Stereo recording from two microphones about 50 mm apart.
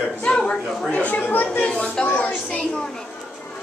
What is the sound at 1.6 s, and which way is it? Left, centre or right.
Speech, left.